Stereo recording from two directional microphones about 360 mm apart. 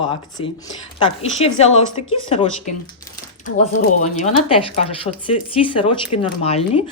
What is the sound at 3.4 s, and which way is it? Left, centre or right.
Speech, left.